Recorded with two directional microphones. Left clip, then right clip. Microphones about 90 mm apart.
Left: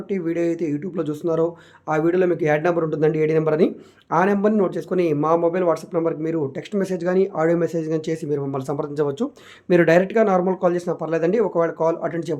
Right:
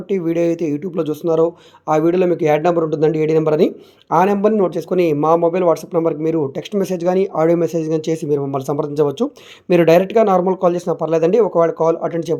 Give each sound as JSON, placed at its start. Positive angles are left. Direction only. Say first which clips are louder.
{"t": 0.1, "sound": "speech", "louder": "right 5 dB", "side_deg": -65}